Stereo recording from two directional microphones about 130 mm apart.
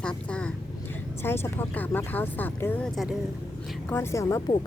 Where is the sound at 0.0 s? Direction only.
5° left (ahead or behind).